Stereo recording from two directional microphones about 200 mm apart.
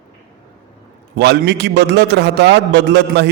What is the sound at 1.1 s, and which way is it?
A man's voice, 60° right (ahead or behind).